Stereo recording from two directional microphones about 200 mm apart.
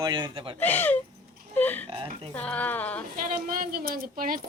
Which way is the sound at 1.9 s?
25° right (ahead or behind).